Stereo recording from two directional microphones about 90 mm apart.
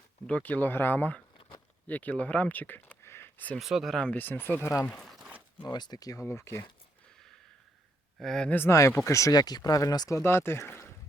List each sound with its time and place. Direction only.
0.3 s speech: 15° left (ahead or behind)
3.6 s speech: 5° right (ahead or behind)
3.9 s speech: 15° left (ahead or behind)
4.9 s a sound: 5° left (ahead or behind)
5.6 s speech: 50° left (ahead or behind)
6.2 s speech: 30° left (ahead or behind)
8.2 s speech: 5° left (ahead or behind)
8.7 s speech: 35° left (ahead or behind)
10.2 s speech: 25° left (ahead or behind)